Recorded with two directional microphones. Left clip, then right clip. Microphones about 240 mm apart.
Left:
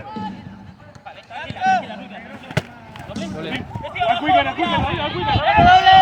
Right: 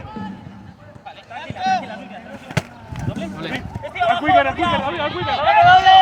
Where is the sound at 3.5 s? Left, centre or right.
Centre.